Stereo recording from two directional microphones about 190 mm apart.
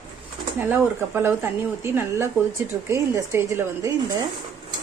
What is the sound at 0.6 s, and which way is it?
Speech, 10° right (ahead or behind).